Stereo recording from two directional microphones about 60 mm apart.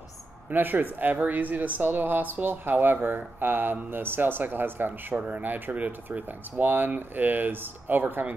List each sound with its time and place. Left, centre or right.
0.5 s speech: right